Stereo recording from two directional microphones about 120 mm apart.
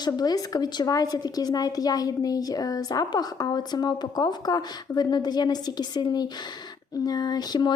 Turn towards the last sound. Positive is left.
turn(degrees=35)  # may be behind; listen again after turning